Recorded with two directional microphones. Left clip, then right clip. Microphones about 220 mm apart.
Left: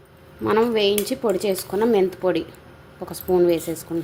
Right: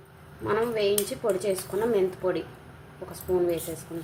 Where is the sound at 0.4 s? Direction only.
35° left (ahead or behind).